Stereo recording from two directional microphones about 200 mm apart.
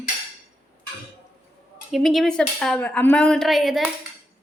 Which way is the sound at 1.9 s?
Centre (ahead or behind).